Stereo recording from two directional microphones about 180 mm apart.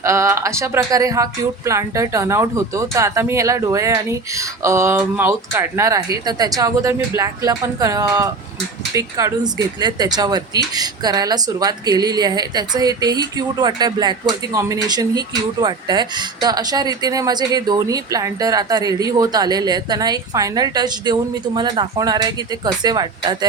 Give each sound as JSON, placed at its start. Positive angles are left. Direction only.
{"t": 0.0, "sound": "speech", "side_deg": -15}